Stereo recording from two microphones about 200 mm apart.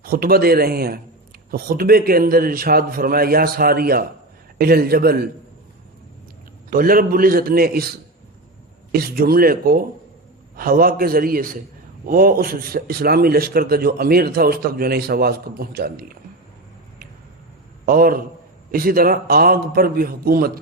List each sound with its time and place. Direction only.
0.0 s a man's voice: 50° right (ahead or behind)
6.7 s a man's voice: 45° right (ahead or behind)
8.9 s a man's voice: 50° right (ahead or behind)
17.8 s a man's voice: 45° right (ahead or behind)